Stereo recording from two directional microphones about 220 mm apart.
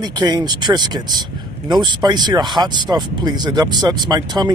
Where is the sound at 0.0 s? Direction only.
20° right (ahead or behind).